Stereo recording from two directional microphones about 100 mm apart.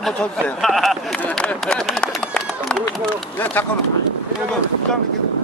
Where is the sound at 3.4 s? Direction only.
20° left (ahead or behind).